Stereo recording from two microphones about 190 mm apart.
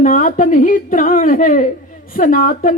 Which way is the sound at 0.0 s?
45° left (ahead or behind).